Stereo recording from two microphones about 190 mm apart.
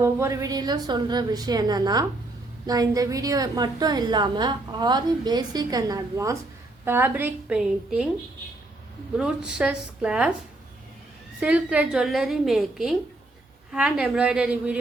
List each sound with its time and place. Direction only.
0.0 s a woman's voice: 15° right (ahead or behind)
9.1 s a woman's voice: 5° right (ahead or behind)
11.3 s a woman's voice: 5° right (ahead or behind)